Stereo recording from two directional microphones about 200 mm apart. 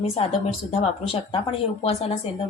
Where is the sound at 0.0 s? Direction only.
30° left (ahead or behind).